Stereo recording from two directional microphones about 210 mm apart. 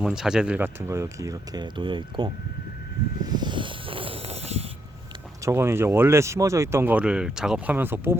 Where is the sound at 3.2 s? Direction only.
20° right (ahead or behind).